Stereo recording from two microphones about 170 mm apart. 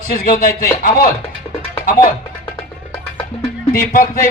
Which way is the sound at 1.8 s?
55° left (ahead or behind).